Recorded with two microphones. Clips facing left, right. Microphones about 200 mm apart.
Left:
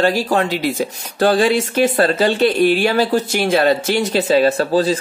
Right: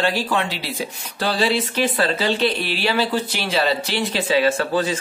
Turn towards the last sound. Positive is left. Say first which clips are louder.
# left 5 dB
turn(degrees=35)  # may be behind; listen again after turning